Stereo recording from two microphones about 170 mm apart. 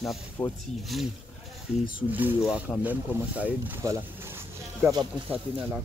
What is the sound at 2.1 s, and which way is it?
Speech, 10° right (ahead or behind).